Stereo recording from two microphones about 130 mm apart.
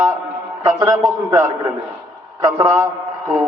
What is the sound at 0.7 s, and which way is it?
A man's voice, 25° right (ahead or behind).